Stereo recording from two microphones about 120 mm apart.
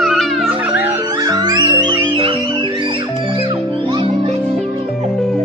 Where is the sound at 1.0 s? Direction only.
30° right (ahead or behind).